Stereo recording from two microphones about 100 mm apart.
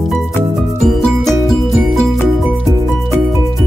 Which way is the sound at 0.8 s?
5° left (ahead or behind).